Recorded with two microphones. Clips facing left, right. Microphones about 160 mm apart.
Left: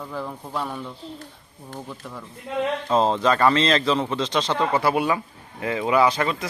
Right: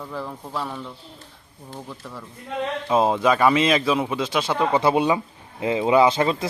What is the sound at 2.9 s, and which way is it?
A man's voice, 10° right (ahead or behind).